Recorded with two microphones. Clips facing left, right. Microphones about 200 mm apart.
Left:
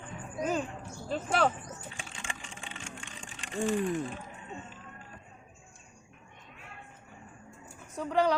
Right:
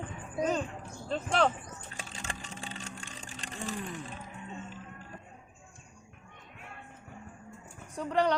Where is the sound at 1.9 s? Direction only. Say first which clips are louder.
Right 1 dB; 40° right (ahead or behind).